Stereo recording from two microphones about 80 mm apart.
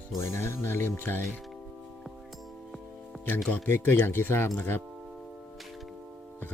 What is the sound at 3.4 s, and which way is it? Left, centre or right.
Speech, centre.